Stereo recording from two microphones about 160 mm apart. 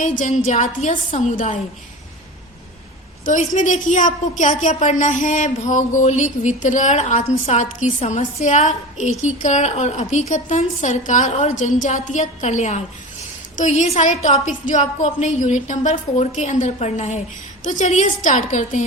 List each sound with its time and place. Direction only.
0.0 s a woman's voice: 50° left (ahead or behind)
3.2 s a woman's voice: 50° left (ahead or behind)